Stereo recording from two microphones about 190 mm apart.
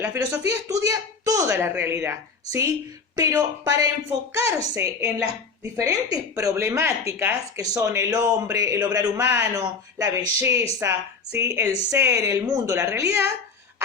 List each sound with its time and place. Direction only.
0.0 s a woman's voice: 10° right (ahead or behind)